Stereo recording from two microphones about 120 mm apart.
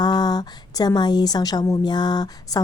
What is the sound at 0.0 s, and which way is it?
A woman's voice, 35° left (ahead or behind).